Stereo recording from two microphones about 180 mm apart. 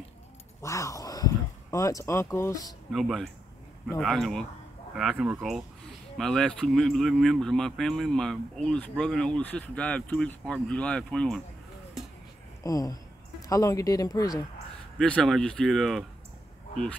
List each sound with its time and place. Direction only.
0.6 s speech: 15° left (ahead or behind)
2.9 s speech: centre (ahead or behind)
12.6 s speech: 20° left (ahead or behind)
15.0 s speech: 5° left (ahead or behind)